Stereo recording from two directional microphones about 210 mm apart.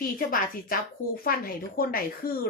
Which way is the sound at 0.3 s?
45° left (ahead or behind).